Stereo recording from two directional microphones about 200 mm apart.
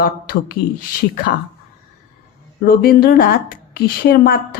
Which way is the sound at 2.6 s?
50° left (ahead or behind).